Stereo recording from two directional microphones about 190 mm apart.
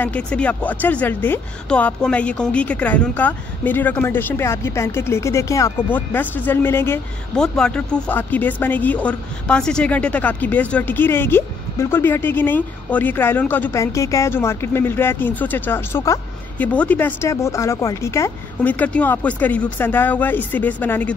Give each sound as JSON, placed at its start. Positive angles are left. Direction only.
{"t": 0.0, "sound": "speech", "side_deg": 5}